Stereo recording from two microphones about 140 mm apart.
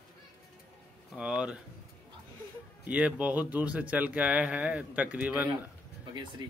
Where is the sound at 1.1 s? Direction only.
5° right (ahead or behind).